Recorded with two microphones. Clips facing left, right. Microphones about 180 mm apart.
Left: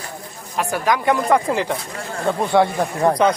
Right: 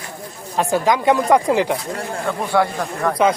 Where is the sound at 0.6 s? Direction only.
25° right (ahead or behind).